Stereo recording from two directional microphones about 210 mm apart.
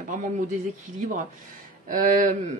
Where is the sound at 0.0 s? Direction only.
40° right (ahead or behind).